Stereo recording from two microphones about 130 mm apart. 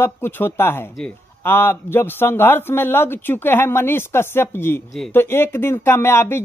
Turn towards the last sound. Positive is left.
turn(degrees=20)  # may be behind; listen again after turning